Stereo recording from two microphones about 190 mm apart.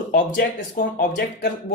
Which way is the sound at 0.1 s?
45° left (ahead or behind).